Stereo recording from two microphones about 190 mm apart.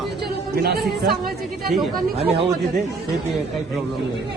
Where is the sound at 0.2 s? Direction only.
55° right (ahead or behind).